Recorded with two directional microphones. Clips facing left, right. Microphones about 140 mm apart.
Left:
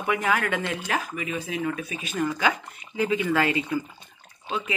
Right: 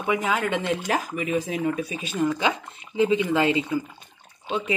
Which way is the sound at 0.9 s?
40° right (ahead or behind).